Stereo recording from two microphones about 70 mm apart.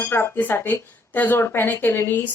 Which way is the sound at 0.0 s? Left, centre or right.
Left.